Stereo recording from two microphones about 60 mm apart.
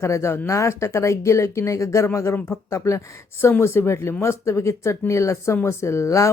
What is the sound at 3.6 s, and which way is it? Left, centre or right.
Speech, left.